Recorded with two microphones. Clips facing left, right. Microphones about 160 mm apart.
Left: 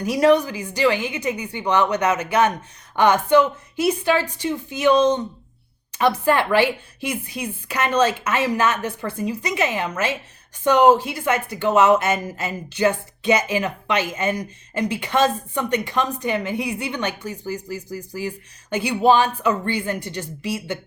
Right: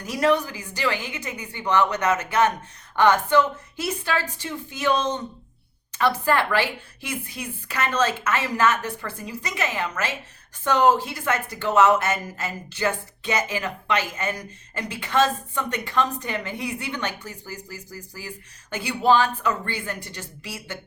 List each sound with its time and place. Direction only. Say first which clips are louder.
0.0 s speech: left 5 dB; 15° left (ahead or behind)